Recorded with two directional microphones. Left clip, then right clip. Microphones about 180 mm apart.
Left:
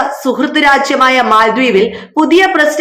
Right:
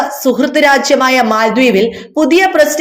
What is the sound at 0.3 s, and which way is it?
A man's voice, 40° right (ahead or behind).